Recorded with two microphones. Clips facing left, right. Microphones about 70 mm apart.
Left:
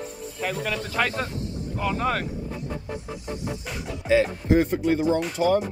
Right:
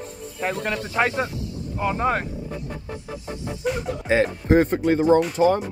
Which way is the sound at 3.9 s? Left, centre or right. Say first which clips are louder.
Left 2 dB; right.